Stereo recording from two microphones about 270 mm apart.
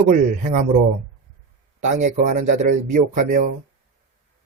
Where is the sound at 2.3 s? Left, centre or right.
Right.